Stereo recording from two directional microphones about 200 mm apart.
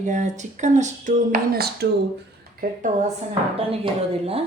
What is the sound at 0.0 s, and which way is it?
A woman's voice, 35° right (ahead or behind).